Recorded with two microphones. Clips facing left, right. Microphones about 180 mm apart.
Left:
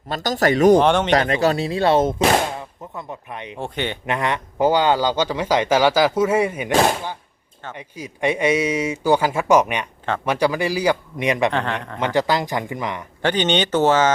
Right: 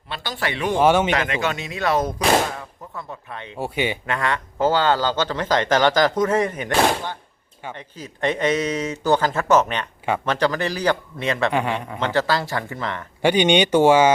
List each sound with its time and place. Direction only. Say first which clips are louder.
0.1 s speech: left 8 dB; 40° left (ahead or behind)
0.8 s speech: even; 5° right (ahead or behind)
1.1 s speech: left 6 dB; 35° left (ahead or behind); by 3.6 s 15° left (ahead or behind)
3.6 s speech: right 2 dB; 10° right (ahead or behind)
4.0 s speech: left 2 dB; 20° left (ahead or behind)
7.8 s speech: left 2 dB; 10° left (ahead or behind)
11.5 s speech: right 1 dB; 10° right (ahead or behind)
11.9 s speech: left 3 dB; 15° left (ahead or behind)
13.2 s speech: right 3 dB; 10° right (ahead or behind)